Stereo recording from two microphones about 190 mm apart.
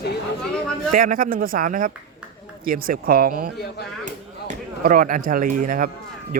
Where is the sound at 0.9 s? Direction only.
45° right (ahead or behind).